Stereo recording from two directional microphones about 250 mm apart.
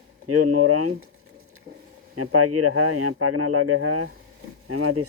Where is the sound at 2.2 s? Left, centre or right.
Right.